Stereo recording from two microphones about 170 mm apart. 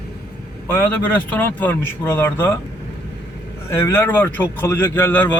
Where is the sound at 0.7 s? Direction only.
10° left (ahead or behind).